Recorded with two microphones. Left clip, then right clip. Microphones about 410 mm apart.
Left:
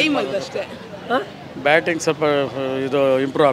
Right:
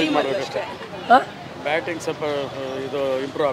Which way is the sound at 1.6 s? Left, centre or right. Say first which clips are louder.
Left 7 dB; left.